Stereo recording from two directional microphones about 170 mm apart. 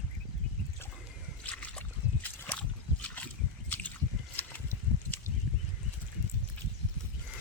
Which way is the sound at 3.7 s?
10° left (ahead or behind).